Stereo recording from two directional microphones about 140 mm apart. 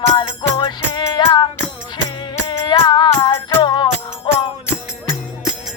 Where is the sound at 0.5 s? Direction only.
30° left (ahead or behind).